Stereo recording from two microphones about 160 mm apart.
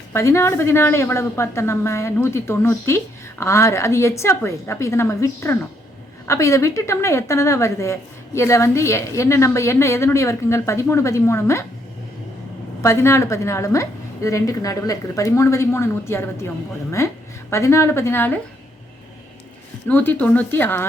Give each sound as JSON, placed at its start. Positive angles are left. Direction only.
{"t": 0.1, "sound": "a woman's voice", "side_deg": 15}
{"t": 12.8, "sound": "a woman's voice", "side_deg": 15}
{"t": 19.9, "sound": "a woman's voice", "side_deg": 10}